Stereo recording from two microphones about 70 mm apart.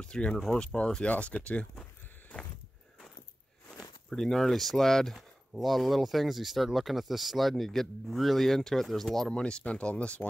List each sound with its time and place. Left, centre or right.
0.0 s speech: centre
4.1 s speech: centre
9.4 s speech: centre